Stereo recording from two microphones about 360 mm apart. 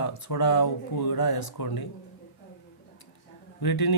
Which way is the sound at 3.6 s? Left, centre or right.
Left.